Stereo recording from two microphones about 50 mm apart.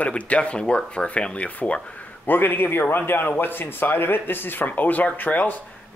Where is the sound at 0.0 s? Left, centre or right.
Left.